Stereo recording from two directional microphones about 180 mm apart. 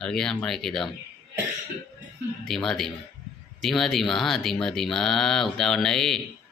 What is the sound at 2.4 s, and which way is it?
Speech, centre (ahead or behind).